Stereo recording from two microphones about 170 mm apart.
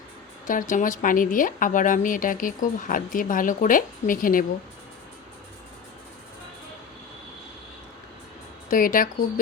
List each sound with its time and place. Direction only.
0.4 s speech: 50° left (ahead or behind)
8.7 s speech: 55° left (ahead or behind)